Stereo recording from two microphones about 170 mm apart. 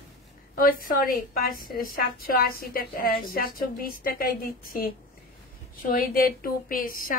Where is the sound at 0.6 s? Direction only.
60° left (ahead or behind).